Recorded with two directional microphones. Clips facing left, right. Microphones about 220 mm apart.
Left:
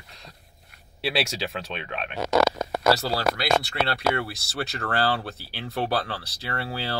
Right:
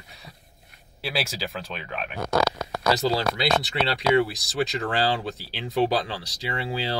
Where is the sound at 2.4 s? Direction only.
25° left (ahead or behind).